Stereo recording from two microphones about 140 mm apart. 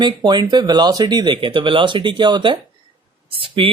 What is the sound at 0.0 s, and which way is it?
Speech, 30° right (ahead or behind).